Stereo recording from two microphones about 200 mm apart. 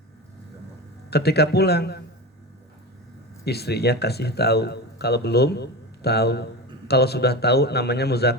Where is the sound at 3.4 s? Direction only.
55° left (ahead or behind).